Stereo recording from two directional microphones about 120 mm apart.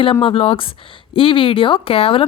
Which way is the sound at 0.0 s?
50° left (ahead or behind).